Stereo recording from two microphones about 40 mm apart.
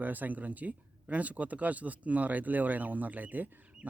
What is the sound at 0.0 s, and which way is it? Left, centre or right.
Speech, right.